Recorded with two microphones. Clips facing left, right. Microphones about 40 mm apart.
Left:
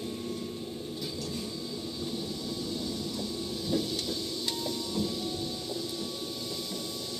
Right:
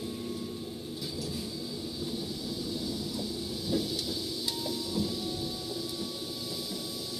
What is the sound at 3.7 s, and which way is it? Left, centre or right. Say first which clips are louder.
Vehicle: left 1 dB; centre.